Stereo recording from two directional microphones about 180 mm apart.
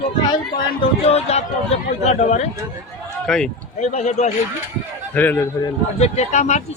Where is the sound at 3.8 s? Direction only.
40° left (ahead or behind).